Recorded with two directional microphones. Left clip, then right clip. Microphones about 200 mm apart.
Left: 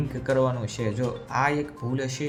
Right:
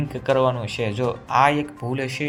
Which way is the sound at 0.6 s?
30° left (ahead or behind).